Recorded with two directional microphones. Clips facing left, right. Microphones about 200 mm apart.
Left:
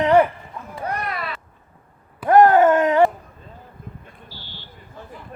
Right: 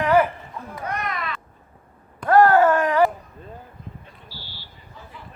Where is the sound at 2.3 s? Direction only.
20° left (ahead or behind).